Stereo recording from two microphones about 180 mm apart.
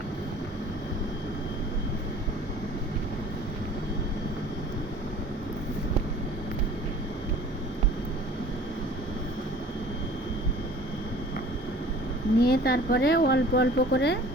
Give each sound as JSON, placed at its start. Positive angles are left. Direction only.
{"t": 12.4, "sound": "speech", "side_deg": 60}